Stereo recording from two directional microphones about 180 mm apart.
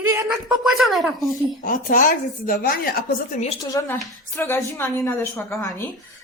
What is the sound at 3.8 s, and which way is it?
Speech, 15° left (ahead or behind).